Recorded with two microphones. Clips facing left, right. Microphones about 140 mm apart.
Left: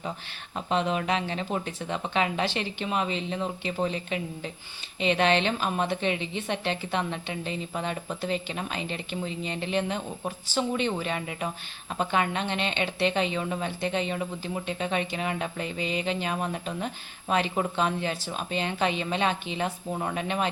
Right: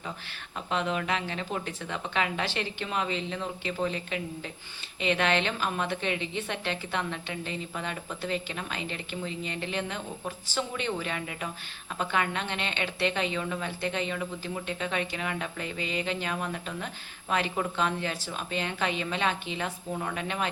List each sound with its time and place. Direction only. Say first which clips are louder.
0.7 s speech: left 3 dB; 25° left (ahead or behind)